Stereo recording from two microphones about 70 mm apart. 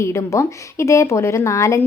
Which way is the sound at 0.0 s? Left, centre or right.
Left.